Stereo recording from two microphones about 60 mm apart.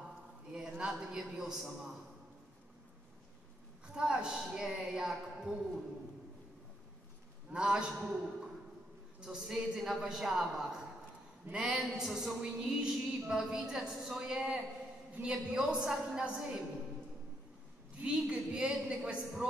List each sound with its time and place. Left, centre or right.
0.7 s a woman's voice: centre
3.8 s a woman's voice: centre
7.5 s a woman's voice: centre
18.0 s a woman's voice: centre